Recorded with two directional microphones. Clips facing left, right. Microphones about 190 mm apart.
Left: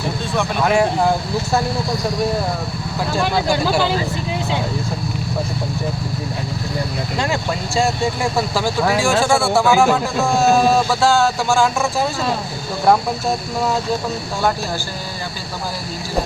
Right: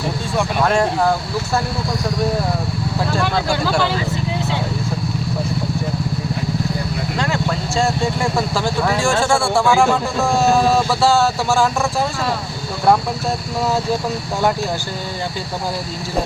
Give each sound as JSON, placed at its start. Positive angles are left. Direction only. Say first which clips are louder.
{"t": 0.6, "sound": "speech", "louder": "left 1 dB", "side_deg": 10}
{"t": 3.2, "sound": "speech", "louder": "left 4 dB", "side_deg": 15}
{"t": 7.8, "sound": "speech", "louder": "left 1 dB", "side_deg": 5}